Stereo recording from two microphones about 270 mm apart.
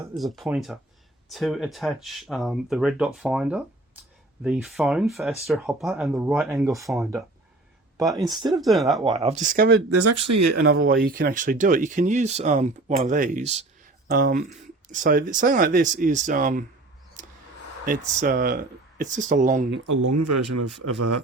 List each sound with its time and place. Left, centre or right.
0.2 s speech: centre
8.1 s speech: centre
8.6 s speech: centre
9.0 s speech: right
9.9 s speech: right
10.7 s speech: right
17.2 s a sound: right
18.2 s speech: right
19.9 s speech: right